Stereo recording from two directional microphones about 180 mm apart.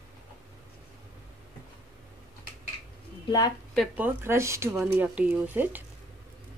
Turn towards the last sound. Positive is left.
turn(degrees=-10)  # may be behind; listen again after turning